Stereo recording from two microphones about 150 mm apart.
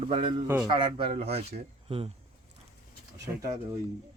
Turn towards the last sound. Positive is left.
turn(degrees=-20)  # may be behind; listen again after turning